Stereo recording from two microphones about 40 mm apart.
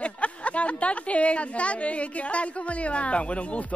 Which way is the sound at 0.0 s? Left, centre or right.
Left.